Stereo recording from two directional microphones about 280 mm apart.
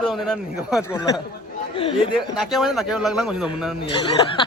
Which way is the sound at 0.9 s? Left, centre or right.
Centre.